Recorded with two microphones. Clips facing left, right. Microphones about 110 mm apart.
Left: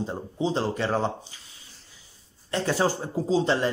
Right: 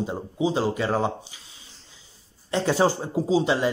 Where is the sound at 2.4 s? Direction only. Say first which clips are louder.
Right 3 dB; 20° right (ahead or behind).